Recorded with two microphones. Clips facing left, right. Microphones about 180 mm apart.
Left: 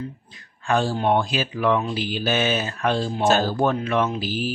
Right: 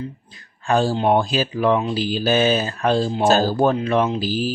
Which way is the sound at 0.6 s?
35° right (ahead or behind).